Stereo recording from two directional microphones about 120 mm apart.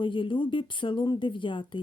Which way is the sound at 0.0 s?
45° left (ahead or behind).